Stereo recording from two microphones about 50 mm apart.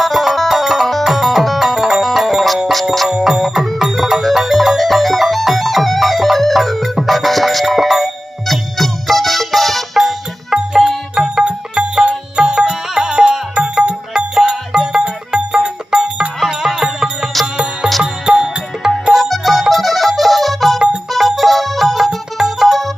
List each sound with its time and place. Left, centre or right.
0.0 s music: centre
3.1 s music: centre
10.8 s music: centre
13.8 s music: right
14.3 s music: centre
16.4 s music: centre
19.1 s music: centre